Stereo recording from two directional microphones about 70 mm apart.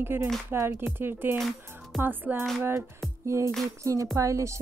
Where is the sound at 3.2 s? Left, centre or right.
Right.